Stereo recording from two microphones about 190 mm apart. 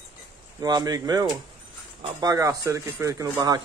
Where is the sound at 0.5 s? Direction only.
20° right (ahead or behind).